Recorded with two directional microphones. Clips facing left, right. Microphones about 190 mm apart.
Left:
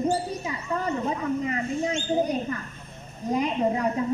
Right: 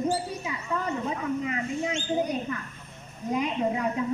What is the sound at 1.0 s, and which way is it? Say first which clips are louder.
Speech: left 2 dB; 40° left (ahead or behind).